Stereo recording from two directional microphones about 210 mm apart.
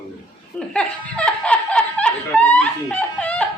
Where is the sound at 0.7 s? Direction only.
5° left (ahead or behind).